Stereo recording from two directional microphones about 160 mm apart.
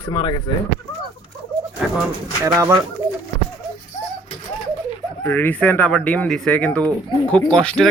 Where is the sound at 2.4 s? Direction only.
15° right (ahead or behind).